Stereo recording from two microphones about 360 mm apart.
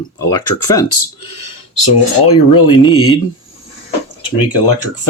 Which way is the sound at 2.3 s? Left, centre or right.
Left.